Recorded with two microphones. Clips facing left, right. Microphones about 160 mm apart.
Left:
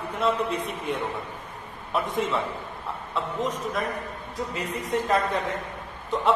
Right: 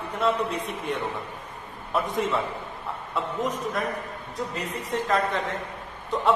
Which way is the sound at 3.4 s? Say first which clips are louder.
Even; centre (ahead or behind).